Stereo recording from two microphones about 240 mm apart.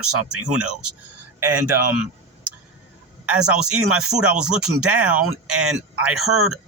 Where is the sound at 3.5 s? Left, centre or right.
Centre.